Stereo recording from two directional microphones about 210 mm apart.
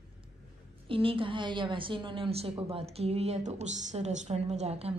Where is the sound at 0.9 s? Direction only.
25° right (ahead or behind).